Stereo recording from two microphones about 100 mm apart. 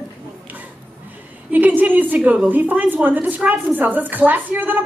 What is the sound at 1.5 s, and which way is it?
A woman's voice, 15° right (ahead or behind).